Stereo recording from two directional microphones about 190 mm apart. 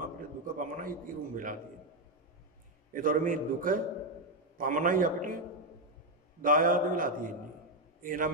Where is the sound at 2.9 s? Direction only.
45° right (ahead or behind).